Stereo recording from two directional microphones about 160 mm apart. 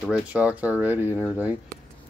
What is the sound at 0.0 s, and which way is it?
Speech, 10° right (ahead or behind).